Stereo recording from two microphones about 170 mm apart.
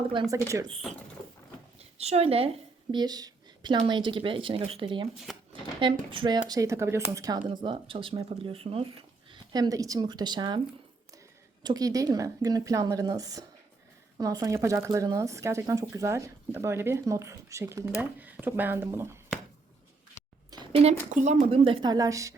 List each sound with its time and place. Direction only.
0.1 s speech: 30° right (ahead or behind)
0.3 s speech: 20° right (ahead or behind)
2.0 s a woman's voice: 40° right (ahead or behind)
2.9 s speech: 25° right (ahead or behind)
5.3 s speech: centre (ahead or behind)
5.8 s speech: 30° right (ahead or behind)
9.3 s speech: 25° right (ahead or behind)
11.6 s speech: 20° right (ahead or behind)
20.5 s a sound: 25° right (ahead or behind)
21.1 s speech: 50° right (ahead or behind)
21.5 s speech: 30° right (ahead or behind)